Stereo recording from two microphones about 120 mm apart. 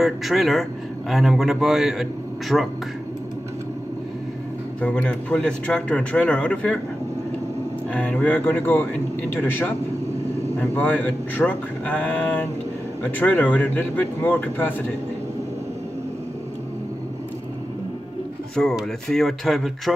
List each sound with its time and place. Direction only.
0.0 s speech: centre (ahead or behind)
4.8 s speech: 10° left (ahead or behind)
7.9 s speech: 10° left (ahead or behind)
18.6 s speech: 5° left (ahead or behind)